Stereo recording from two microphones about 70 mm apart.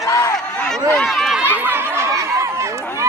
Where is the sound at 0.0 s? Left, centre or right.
Left.